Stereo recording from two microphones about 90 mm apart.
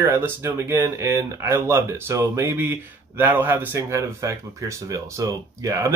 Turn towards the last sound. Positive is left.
turn(degrees=-35)  # may be behind; listen again after turning